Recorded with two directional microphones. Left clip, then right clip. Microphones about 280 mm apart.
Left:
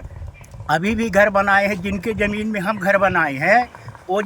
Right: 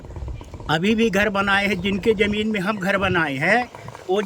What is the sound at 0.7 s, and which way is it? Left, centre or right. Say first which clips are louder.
Speech: left 1 dB; centre.